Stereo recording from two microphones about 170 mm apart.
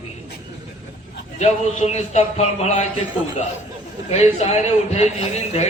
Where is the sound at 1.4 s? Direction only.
40° left (ahead or behind).